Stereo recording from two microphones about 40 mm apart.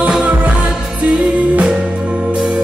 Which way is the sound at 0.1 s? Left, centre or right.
Right.